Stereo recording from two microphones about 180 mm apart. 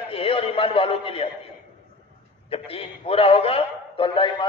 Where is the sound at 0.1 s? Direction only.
30° left (ahead or behind).